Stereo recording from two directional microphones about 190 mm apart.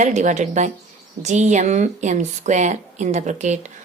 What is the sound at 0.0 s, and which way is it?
Speech, 40° right (ahead or behind).